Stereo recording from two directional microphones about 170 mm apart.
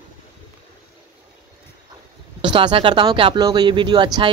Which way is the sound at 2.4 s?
30° right (ahead or behind).